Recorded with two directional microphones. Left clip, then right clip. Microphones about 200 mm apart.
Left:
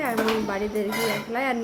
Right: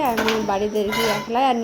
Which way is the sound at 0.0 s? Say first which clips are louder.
Right 4 dB; 10° right (ahead or behind).